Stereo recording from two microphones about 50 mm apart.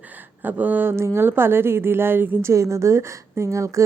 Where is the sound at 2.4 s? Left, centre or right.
Right.